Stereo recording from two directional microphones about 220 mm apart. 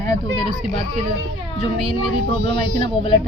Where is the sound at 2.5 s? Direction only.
25° left (ahead or behind).